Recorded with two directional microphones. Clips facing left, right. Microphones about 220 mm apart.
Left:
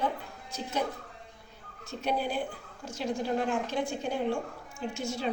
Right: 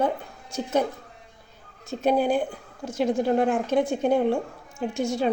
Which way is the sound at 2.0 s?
45° right (ahead or behind).